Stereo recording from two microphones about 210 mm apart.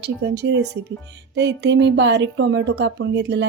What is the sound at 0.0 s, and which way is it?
Speech, 55° right (ahead or behind).